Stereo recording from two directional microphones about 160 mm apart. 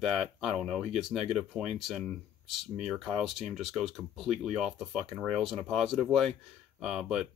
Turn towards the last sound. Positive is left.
turn(degrees=0)  # may be behind; listen again after turning